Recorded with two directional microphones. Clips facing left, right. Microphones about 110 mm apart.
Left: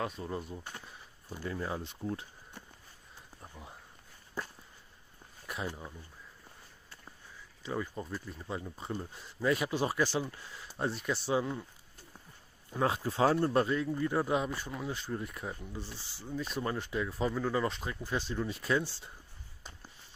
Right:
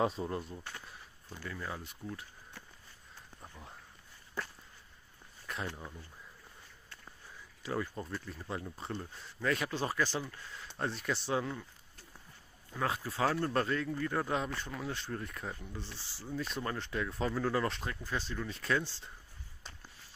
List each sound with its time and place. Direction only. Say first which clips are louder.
0.2 s speech: right 1 dB; 5° left (ahead or behind)
1.5 s speech: left 5 dB; 25° left (ahead or behind)
3.4 s a sound: left 2 dB; 10° left (ahead or behind)
5.5 s speech: left 2 dB; 10° left (ahead or behind)
7.8 s speech: left 1 dB; 10° left (ahead or behind)
12.7 s speech: left 4 dB; 25° left (ahead or behind); by 17.9 s 5° left (ahead or behind)
18.0 s speech: left 5 dB; 15° left (ahead or behind)